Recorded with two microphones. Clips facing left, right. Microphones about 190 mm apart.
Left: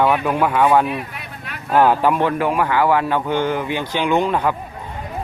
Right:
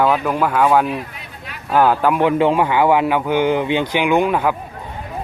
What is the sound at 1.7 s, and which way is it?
Speech, centre (ahead or behind).